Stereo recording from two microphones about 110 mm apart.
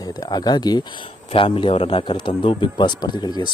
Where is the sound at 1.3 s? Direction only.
55° left (ahead or behind).